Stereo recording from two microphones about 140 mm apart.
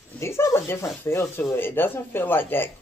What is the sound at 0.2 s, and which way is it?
Speech, 20° left (ahead or behind).